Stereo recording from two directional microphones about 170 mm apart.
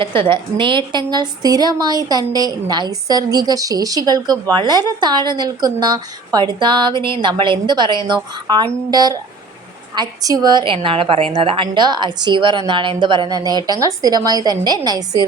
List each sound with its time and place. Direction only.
0.0 s a woman's voice: 30° right (ahead or behind)